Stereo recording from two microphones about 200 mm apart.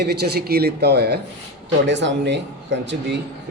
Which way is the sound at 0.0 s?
55° right (ahead or behind).